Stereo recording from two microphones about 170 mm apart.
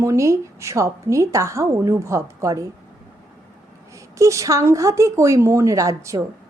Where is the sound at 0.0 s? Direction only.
15° right (ahead or behind).